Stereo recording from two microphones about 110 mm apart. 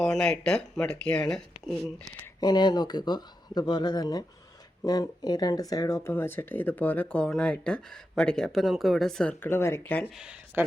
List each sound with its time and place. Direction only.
0.0 s speech: 5° left (ahead or behind)
2.4 s speech: 40° left (ahead or behind); by 9.3 s 5° left (ahead or behind)
9.4 s speech: 20° left (ahead or behind)
10.2 s speech: 10° right (ahead or behind)